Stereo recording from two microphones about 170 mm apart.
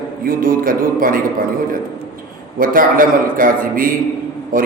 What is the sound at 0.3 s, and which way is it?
Speech, 55° right (ahead or behind).